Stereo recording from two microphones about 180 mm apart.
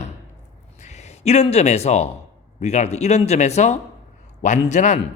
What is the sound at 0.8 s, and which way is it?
A man's voice, 40° left (ahead or behind).